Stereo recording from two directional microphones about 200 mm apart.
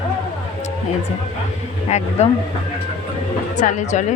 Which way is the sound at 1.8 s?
35° left (ahead or behind).